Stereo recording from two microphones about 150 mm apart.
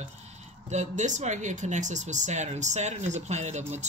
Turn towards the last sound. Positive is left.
turn(degrees=-50)  # may be behind; listen again after turning